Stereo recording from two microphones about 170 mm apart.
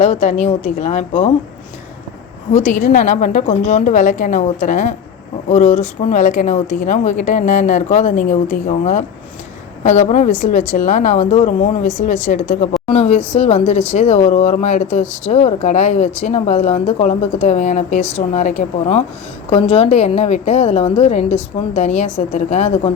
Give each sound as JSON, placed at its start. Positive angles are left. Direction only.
{"t": 0.0, "sound": "speech", "side_deg": 40}
{"t": 2.5, "sound": "a woman's voice", "side_deg": 45}